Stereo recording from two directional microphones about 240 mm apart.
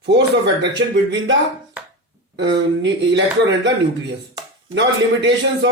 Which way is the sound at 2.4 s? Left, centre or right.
Right.